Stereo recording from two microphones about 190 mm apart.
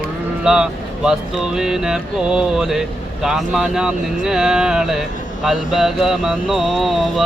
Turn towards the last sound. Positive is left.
turn(degrees=0)  # may be behind; listen again after turning